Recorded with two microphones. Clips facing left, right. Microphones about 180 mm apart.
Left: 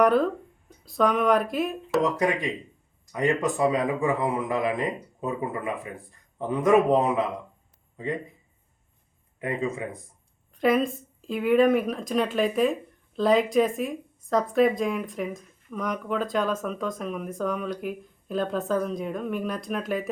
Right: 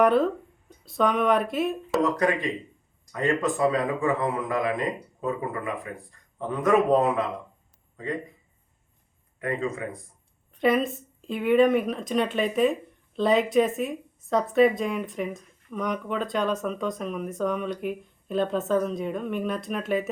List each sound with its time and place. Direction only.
0.0 s speech: centre (ahead or behind)
2.1 s a man's voice: 15° left (ahead or behind)
9.4 s a man's voice: 20° left (ahead or behind)
10.5 s speech: centre (ahead or behind)